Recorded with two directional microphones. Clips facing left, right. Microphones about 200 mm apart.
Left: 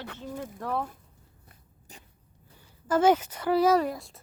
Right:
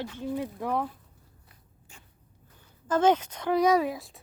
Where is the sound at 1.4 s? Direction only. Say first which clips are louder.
Left 4 dB; 40° left (ahead or behind).